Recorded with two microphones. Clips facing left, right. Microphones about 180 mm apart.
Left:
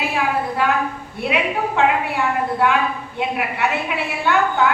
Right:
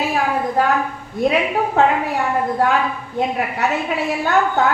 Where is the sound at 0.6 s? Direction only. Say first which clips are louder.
Right 3 dB; 40° right (ahead or behind).